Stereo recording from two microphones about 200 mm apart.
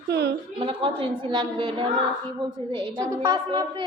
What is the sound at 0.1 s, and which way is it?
Speech, 55° right (ahead or behind).